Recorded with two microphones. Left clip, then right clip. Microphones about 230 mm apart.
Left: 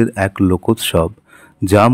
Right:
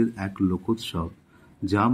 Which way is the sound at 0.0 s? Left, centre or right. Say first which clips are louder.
Left 11 dB; left.